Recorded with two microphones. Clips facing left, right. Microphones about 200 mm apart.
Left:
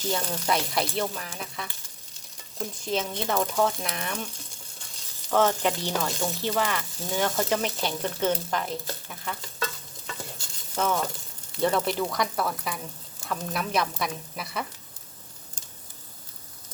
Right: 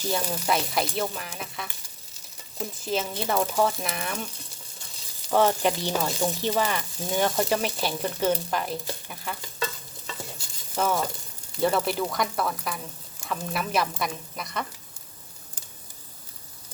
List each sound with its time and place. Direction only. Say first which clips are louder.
0.1 s speech: right 1 dB; 10° right (ahead or behind)
5.3 s speech: right 1 dB; 10° right (ahead or behind)
10.8 s speech: right 1 dB; 10° right (ahead or behind)